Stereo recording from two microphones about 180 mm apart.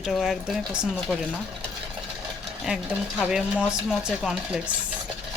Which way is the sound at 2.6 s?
5° right (ahead or behind).